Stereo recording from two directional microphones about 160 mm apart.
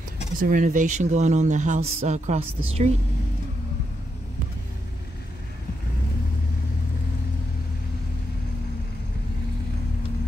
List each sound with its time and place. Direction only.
0.4 s speech: 55° right (ahead or behind)